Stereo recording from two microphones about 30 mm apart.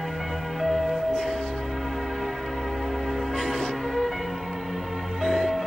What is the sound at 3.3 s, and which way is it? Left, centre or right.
Music, centre.